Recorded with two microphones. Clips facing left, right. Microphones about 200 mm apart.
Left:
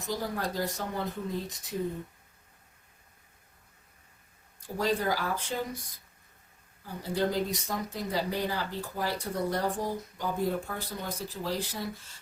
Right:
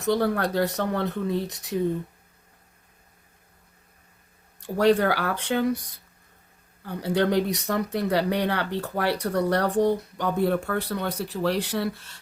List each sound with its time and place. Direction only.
0.0 s speech: 70° right (ahead or behind)
4.6 s speech: 70° right (ahead or behind)